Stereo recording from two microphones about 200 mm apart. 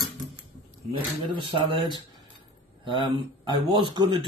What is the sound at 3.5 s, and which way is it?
Speech, 20° right (ahead or behind).